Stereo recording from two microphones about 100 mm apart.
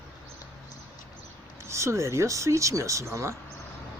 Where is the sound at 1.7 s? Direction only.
30° right (ahead or behind).